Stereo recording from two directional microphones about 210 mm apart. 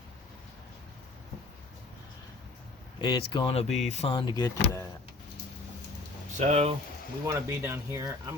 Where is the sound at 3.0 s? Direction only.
20° left (ahead or behind).